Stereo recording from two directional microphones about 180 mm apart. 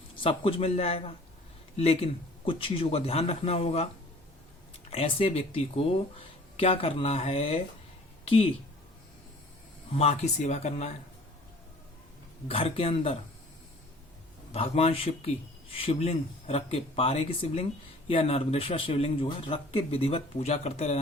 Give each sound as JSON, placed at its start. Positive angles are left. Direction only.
{"t": 0.2, "sound": "speech", "side_deg": 30}
{"t": 4.9, "sound": "speech", "side_deg": 30}
{"t": 9.9, "sound": "speech", "side_deg": 35}
{"t": 12.5, "sound": "speech", "side_deg": 30}
{"t": 14.5, "sound": "speech", "side_deg": 35}